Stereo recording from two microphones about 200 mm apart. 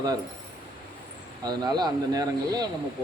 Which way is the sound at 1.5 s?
20° right (ahead or behind).